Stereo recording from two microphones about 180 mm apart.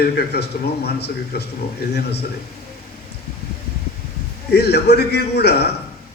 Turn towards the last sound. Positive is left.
turn(degrees=65)  # may be behind; listen again after turning